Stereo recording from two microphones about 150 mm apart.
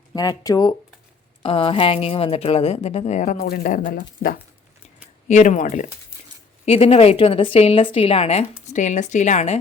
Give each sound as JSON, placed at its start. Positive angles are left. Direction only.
{"t": 0.1, "sound": "speech", "side_deg": 25}
{"t": 3.3, "sound": "speech", "side_deg": 90}
{"t": 3.6, "sound": "speech", "side_deg": 65}
{"t": 5.3, "sound": "speech", "side_deg": 55}
{"t": 6.7, "sound": "speech", "side_deg": 40}
{"t": 8.7, "sound": "a woman's voice", "side_deg": 55}